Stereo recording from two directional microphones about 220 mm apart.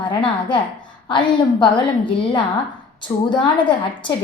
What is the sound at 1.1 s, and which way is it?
A woman's voice, 20° left (ahead or behind).